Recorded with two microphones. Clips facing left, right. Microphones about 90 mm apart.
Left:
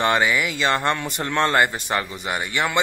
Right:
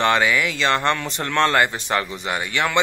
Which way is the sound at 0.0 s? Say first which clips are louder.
Right 1 dB; 15° left (ahead or behind).